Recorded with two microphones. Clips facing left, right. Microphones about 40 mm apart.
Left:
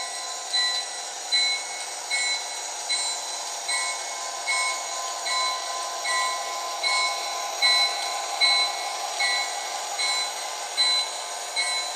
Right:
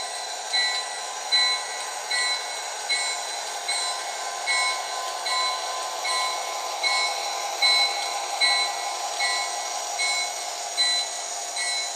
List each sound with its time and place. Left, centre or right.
4.5 s train: right
6.8 s train: centre
7.6 s a sound: centre
9.9 s train: left